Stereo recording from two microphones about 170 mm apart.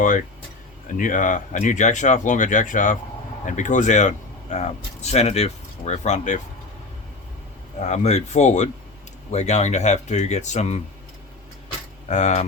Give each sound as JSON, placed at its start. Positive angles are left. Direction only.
{"t": 0.9, "sound": "speech", "side_deg": 50}
{"t": 7.8, "sound": "speech", "side_deg": 45}
{"t": 12.0, "sound": "speech", "side_deg": 40}